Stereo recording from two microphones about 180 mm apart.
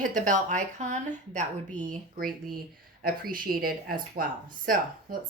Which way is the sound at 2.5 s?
55° right (ahead or behind).